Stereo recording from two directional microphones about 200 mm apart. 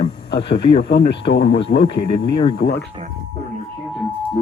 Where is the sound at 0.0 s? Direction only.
30° left (ahead or behind).